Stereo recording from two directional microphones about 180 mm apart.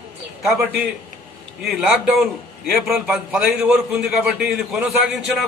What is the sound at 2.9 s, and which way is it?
A man's voice, 5° right (ahead or behind).